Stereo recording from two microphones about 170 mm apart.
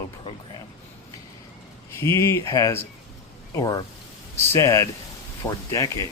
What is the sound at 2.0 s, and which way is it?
Speech, 15° left (ahead or behind).